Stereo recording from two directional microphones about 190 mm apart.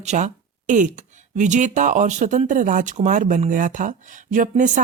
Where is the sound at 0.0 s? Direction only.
35° right (ahead or behind).